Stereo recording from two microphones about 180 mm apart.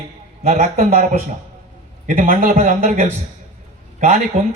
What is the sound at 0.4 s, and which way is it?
Speech, 40° right (ahead or behind).